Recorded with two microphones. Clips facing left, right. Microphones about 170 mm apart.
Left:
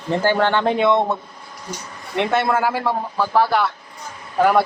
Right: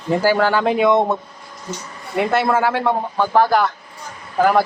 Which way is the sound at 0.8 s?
15° right (ahead or behind).